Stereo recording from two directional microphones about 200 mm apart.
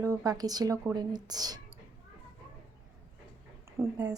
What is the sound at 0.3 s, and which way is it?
A woman's voice, 20° right (ahead or behind).